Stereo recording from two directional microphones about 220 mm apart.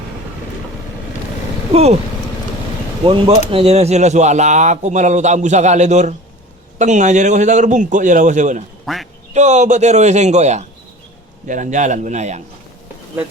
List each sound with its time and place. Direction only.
1.7 s speech: 30° right (ahead or behind)
3.0 s speech: 25° right (ahead or behind)
8.9 s speech: centre (ahead or behind)
9.3 s speech: 30° right (ahead or behind)